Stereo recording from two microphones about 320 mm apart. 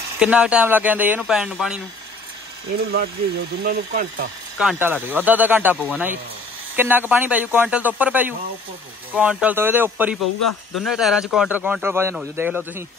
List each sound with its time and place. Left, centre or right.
0.2 s speech: centre
3.6 s speech: right
4.6 s speech: centre
10.2 s speech: left
10.8 s speech: centre